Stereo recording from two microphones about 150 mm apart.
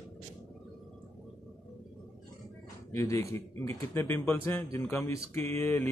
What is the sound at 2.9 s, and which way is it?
Speech, 20° left (ahead or behind).